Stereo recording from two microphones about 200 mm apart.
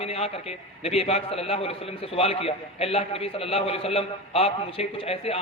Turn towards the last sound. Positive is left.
turn(degrees=30)  # may be behind; listen again after turning